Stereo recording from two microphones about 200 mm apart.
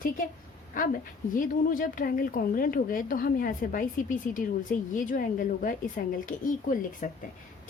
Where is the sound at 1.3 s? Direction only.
40° left (ahead or behind).